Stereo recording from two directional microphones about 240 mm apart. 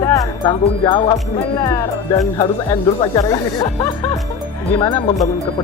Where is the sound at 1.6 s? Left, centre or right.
Centre.